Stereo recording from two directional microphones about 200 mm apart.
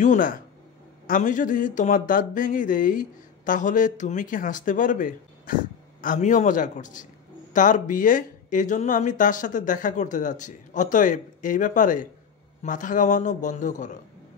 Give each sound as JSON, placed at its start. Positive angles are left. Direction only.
{"t": 0.0, "sound": "speech", "side_deg": 40}